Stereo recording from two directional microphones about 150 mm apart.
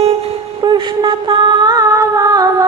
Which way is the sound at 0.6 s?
30° right (ahead or behind).